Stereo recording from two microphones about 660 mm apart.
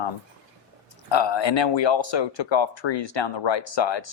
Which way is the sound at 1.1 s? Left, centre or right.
Left.